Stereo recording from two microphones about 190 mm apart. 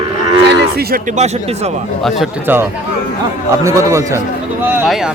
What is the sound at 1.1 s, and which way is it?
Speech, 35° right (ahead or behind).